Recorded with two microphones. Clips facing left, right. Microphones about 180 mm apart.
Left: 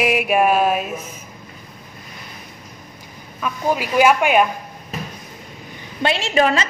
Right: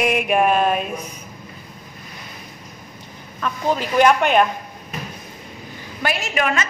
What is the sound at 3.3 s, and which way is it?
Speech, 10° left (ahead or behind).